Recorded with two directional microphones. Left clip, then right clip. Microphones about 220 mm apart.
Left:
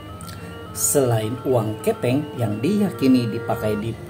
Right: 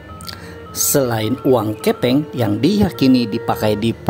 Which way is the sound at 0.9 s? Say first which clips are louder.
Right 2 dB; 40° right (ahead or behind).